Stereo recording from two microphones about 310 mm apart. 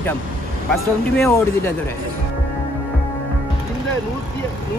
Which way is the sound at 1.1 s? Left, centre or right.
Centre.